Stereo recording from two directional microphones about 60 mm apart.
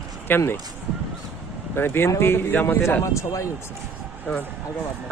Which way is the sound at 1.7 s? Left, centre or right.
Left.